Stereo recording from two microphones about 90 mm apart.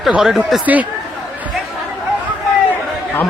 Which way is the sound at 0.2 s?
5° right (ahead or behind).